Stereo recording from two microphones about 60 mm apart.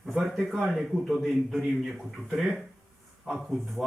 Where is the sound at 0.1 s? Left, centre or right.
Centre.